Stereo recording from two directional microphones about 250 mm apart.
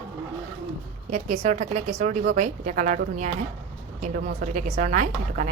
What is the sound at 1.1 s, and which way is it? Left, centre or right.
A woman's voice, right.